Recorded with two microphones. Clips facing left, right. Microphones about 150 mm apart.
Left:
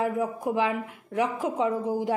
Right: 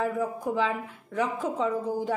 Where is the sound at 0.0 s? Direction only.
15° left (ahead or behind).